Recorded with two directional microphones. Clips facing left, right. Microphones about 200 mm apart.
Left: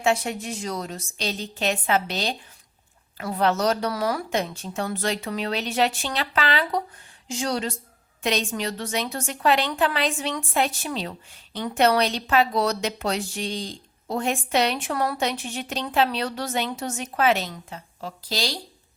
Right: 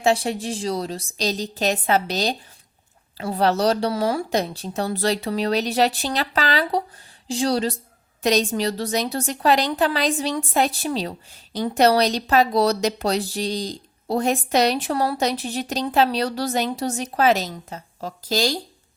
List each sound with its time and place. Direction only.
0.0 s a woman's voice: 35° right (ahead or behind)